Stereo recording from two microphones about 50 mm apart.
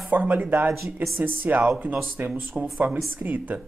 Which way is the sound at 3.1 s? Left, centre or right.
Right.